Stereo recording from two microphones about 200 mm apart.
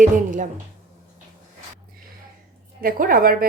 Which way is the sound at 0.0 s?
40° right (ahead or behind).